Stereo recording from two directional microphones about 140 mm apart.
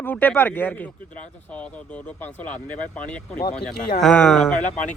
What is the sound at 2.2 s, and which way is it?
Speech, 10° left (ahead or behind).